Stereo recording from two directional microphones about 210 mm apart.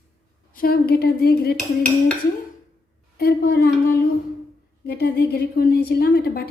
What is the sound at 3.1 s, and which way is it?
A woman's voice, 50° left (ahead or behind).